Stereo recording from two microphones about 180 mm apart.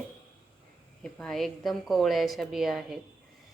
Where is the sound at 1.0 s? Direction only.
5° left (ahead or behind).